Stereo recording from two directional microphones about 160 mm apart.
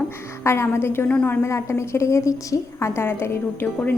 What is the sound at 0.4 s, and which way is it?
A woman's voice, 15° left (ahead or behind).